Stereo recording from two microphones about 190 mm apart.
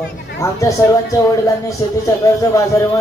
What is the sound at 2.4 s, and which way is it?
Speech, 15° left (ahead or behind).